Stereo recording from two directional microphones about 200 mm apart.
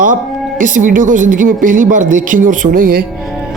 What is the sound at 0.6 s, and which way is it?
Speech, 40° right (ahead or behind).